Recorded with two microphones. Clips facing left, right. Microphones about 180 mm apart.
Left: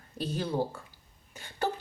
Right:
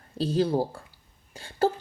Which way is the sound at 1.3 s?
30° right (ahead or behind).